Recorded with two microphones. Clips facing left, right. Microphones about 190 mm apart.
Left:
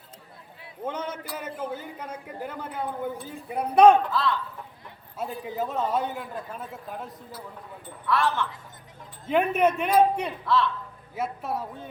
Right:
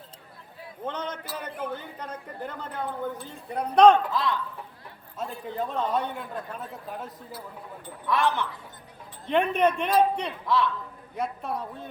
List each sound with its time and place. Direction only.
0.9 s speech: 10° left (ahead or behind)
4.1 s a woman's voice: 15° right (ahead or behind)
5.1 s a man's voice: 5° left (ahead or behind)
8.0 s a woman's voice: 15° right (ahead or behind)
9.2 s speech: 5° left (ahead or behind)
10.4 s a woman's voice: 15° right (ahead or behind)
11.1 s a man's voice: 5° left (ahead or behind)